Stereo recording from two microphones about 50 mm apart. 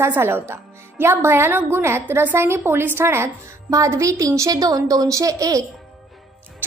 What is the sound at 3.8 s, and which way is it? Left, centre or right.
Speech, right.